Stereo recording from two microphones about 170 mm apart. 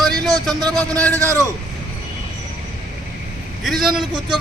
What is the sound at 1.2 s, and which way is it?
Speech, 20° right (ahead or behind).